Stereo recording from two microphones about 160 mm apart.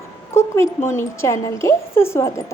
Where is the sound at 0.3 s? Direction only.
15° left (ahead or behind).